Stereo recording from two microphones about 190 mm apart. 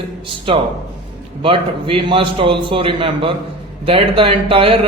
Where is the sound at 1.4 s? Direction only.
30° right (ahead or behind).